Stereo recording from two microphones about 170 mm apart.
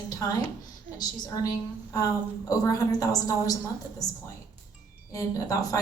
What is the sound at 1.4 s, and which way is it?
A woman's voice, 20° left (ahead or behind).